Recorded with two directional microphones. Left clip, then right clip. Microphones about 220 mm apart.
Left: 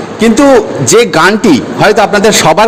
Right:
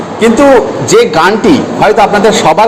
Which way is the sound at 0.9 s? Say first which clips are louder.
Even; 50° left (ahead or behind).